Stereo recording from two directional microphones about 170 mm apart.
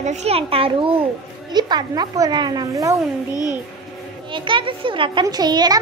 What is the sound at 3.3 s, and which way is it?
Speech, 20° left (ahead or behind).